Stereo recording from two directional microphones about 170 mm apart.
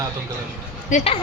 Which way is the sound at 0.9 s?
35° left (ahead or behind).